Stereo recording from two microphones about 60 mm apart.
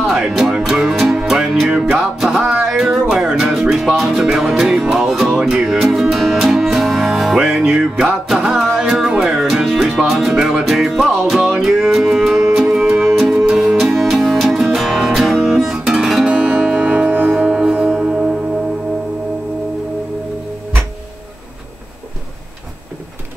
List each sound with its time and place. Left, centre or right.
0.0 s music: centre
16.3 s music: right
17.3 s music: centre